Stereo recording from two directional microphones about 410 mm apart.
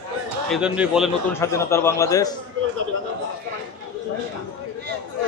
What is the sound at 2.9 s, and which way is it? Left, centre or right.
Speech, right.